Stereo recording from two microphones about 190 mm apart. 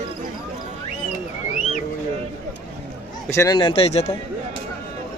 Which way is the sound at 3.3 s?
15° left (ahead or behind).